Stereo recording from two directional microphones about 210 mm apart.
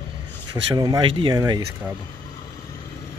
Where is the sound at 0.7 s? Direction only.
20° right (ahead or behind).